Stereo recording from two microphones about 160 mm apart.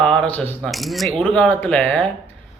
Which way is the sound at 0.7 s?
Centre (ahead or behind).